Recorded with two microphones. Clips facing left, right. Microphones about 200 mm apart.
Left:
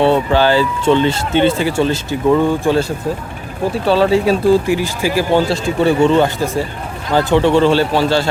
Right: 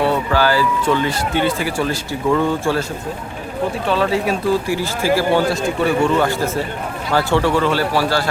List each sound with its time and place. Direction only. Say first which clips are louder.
0.0 s speech: left 4 dB; 25° left (ahead or behind)
3.8 s speech: left 7 dB; 30° left (ahead or behind)
5.5 s speech: left 3 dB; 25° left (ahead or behind)